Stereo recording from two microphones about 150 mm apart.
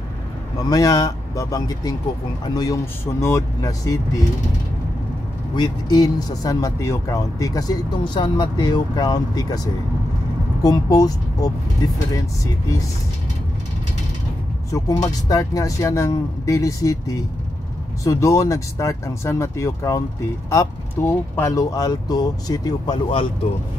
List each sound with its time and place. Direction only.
0.7 s speech: 25° left (ahead or behind)
5.6 s speech: 25° left (ahead or behind)
10.6 s speech: 25° left (ahead or behind)
14.7 s speech: 20° left (ahead or behind)